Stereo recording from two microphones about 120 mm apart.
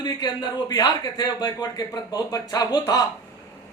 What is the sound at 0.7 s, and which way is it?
Speech, 35° left (ahead or behind).